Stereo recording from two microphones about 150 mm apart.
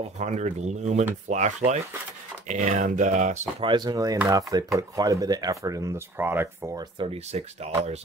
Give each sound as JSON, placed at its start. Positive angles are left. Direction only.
{"t": 0.2, "sound": "speech", "side_deg": -50}
{"t": 3.6, "sound": "speech", "side_deg": -30}
{"t": 7.0, "sound": "speech", "side_deg": -40}